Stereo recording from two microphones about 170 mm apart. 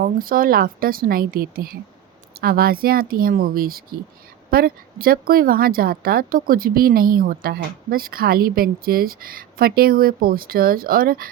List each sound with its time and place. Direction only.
0.0 s a woman's voice: 55° right (ahead or behind)